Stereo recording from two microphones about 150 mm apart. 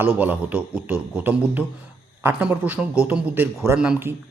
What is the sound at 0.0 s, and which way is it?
A man's voice, 10° right (ahead or behind).